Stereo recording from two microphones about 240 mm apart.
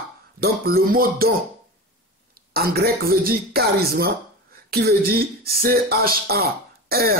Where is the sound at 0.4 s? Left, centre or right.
Right.